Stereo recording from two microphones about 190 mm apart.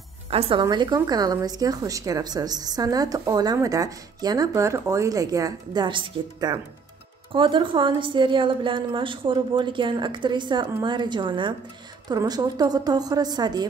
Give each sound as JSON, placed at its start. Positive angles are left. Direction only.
{"t": 0.3, "sound": "speech", "side_deg": -30}